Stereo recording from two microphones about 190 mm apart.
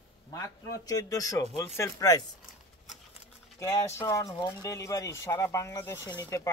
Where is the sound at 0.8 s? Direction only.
20° left (ahead or behind).